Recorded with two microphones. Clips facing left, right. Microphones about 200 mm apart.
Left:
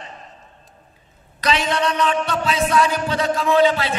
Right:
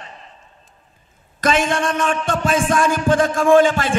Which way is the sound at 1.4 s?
50° right (ahead or behind).